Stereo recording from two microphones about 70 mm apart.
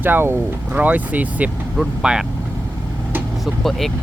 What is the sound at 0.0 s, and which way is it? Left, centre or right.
Speech, right.